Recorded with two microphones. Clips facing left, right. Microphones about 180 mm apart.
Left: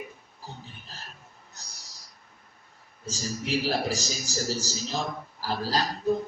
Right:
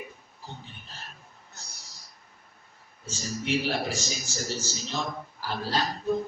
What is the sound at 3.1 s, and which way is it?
A man's voice, 35° left (ahead or behind).